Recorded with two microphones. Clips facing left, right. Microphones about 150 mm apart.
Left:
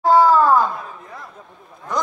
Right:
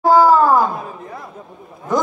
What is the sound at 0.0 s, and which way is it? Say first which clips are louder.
Groan: right 2 dB; centre (ahead or behind).